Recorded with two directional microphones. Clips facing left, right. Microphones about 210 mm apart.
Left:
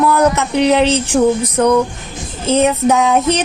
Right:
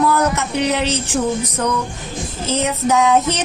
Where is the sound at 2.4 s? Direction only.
60° left (ahead or behind).